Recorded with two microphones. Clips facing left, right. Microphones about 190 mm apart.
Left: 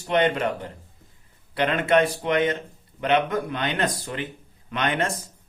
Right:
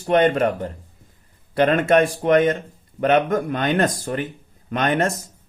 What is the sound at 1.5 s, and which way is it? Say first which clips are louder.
Speech: right 5 dB; 45° right (ahead or behind).